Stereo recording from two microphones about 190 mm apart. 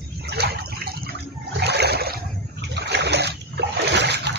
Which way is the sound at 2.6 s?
65° right (ahead or behind).